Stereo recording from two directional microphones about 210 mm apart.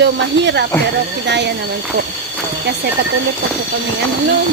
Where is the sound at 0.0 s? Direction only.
60° right (ahead or behind).